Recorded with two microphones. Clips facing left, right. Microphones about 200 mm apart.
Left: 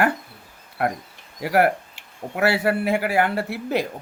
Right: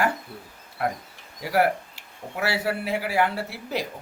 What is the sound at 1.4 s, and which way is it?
Speech, 55° left (ahead or behind).